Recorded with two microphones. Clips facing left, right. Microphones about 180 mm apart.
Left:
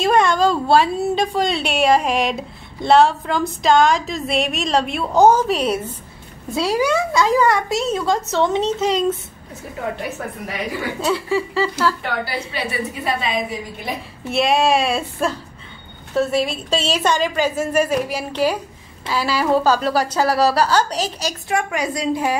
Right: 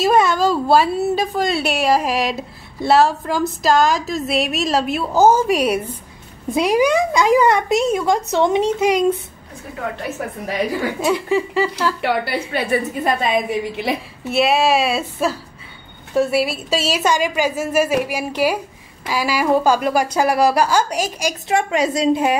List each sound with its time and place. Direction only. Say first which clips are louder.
0.0 s a woman's voice: right 1 dB; 5° right (ahead or behind)
11.0 s a woman's voice: right 1 dB; 15° right (ahead or behind)
12.0 s a woman's voice: right 5 dB; 55° right (ahead or behind)
13.7 s a woman's voice: right 6 dB; 80° right
14.2 s a woman's voice: right 1 dB; 5° right (ahead or behind)
21.5 s a woman's voice: right 4 dB; 25° right (ahead or behind)